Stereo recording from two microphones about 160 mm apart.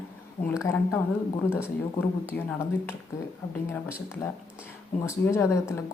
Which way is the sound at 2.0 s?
15° left (ahead or behind).